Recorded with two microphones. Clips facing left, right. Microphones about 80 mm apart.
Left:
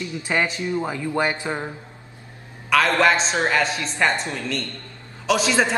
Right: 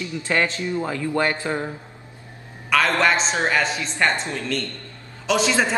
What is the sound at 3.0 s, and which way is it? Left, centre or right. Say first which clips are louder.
Speech: left 1 dB; centre.